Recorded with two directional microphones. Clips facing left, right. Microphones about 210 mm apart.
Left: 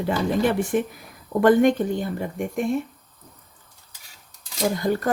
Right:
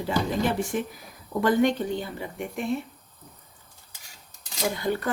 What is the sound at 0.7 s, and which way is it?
Speech, 55° left (ahead or behind).